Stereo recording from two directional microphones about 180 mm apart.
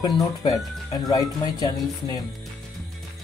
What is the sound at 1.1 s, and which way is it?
Speech, 20° left (ahead or behind).